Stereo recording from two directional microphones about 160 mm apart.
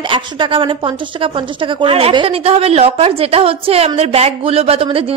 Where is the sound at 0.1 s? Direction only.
30° right (ahead or behind).